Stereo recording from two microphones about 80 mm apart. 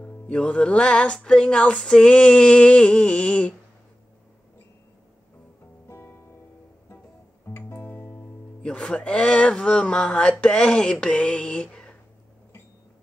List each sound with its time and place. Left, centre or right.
0.0 s music: centre
5.9 s music: left
7.4 s music: left
8.6 s music: centre